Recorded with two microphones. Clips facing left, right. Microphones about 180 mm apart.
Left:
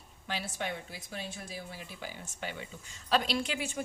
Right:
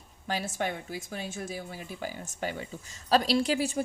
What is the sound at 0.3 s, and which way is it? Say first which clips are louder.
A woman's voice: right 5 dB; 45° right (ahead or behind).